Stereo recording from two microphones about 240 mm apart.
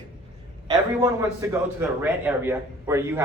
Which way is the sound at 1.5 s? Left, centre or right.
Centre.